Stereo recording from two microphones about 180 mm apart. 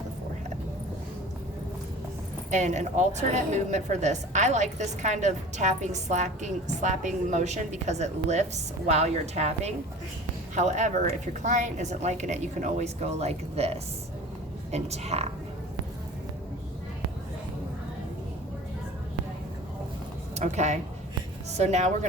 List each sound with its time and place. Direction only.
2.5 s a woman's voice: 40° right (ahead or behind)
20.3 s a woman's voice: 40° right (ahead or behind)